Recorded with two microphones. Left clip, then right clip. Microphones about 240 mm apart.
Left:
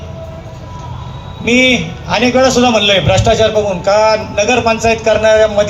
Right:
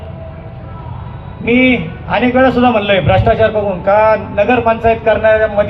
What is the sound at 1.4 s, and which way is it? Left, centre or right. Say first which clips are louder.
A man's voice: left 1 dB; left.